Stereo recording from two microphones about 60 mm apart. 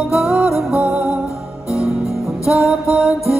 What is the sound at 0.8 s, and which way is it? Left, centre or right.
Music, right.